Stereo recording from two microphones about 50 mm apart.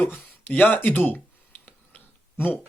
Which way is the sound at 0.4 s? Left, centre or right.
Left.